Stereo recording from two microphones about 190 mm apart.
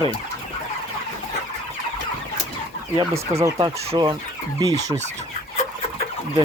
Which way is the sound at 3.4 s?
20° right (ahead or behind).